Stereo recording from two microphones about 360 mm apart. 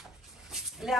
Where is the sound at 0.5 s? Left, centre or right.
Centre.